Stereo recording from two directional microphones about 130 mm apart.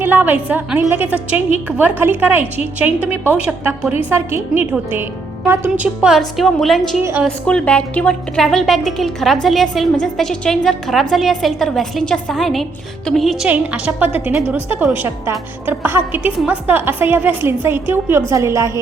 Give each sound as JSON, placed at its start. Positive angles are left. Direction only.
{"t": 0.0, "sound": "a woman's voice", "side_deg": -15}
{"t": 13.5, "sound": "a woman's voice", "side_deg": -10}